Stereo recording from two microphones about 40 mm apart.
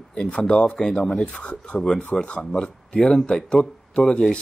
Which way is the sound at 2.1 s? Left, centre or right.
Centre.